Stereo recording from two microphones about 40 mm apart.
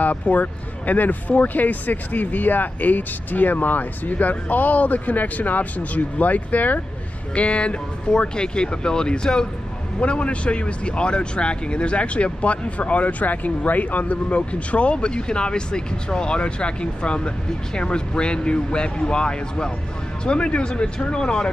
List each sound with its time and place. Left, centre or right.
0.0 s speech: left
7.3 s speech: left
9.9 s speech: left